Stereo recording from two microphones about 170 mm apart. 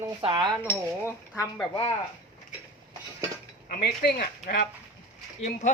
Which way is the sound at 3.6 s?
65° left (ahead or behind).